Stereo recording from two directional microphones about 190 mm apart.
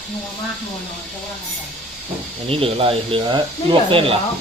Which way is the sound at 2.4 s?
30° right (ahead or behind).